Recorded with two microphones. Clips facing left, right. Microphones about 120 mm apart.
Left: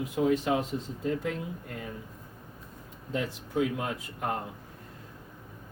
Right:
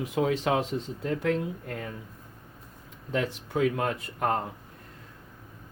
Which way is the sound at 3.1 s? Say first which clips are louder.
Right 2 dB; 75° right (ahead or behind).